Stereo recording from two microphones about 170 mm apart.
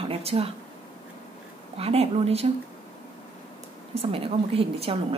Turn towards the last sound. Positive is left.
turn(degrees=-35)  # may be behind; listen again after turning